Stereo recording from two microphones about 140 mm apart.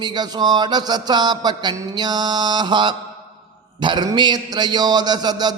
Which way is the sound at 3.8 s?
30° right (ahead or behind).